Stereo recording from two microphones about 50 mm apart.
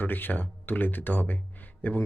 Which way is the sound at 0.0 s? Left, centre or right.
Left.